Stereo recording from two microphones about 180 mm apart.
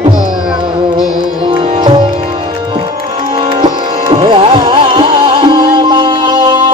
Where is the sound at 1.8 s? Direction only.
25° right (ahead or behind).